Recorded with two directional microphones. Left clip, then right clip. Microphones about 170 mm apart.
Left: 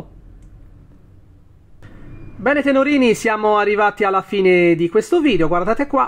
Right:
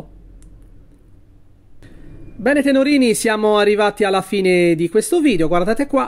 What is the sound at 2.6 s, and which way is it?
Speech, 35° right (ahead or behind).